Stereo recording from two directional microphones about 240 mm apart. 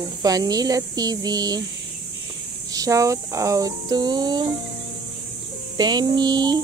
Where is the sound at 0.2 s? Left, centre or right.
Centre.